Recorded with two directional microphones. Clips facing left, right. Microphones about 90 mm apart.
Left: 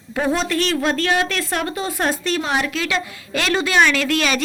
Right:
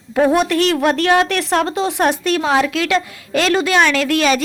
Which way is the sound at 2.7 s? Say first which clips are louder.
Right 5 dB; 55° right (ahead or behind).